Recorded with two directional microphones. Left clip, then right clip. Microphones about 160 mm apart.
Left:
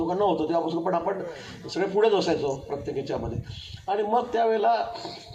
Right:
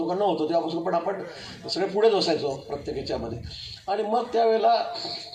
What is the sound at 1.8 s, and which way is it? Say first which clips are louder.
Speech: right 1 dB; 25° right (ahead or behind).